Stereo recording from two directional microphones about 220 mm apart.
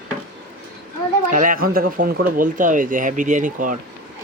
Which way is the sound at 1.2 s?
35° right (ahead or behind).